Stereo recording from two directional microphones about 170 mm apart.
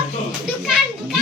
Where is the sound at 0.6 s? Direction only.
Centre (ahead or behind).